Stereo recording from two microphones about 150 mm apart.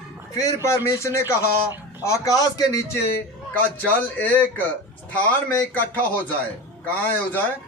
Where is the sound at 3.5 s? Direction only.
10° left (ahead or behind).